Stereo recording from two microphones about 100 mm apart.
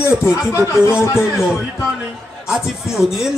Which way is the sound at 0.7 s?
25° left (ahead or behind).